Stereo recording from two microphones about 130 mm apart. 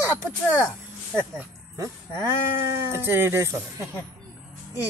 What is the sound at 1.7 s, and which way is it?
Speech, 20° right (ahead or behind).